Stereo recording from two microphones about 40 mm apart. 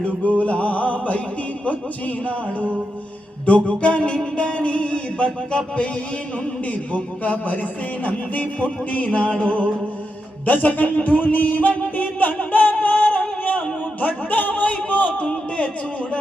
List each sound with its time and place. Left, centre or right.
0.0 s a man's voice: left
11.0 s music: left
14.0 s a man's voice: left